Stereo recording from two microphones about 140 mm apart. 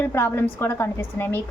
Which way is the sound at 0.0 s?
15° left (ahead or behind).